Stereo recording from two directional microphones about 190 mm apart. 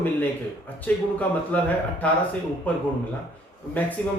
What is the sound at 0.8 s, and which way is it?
A man's voice, 10° left (ahead or behind).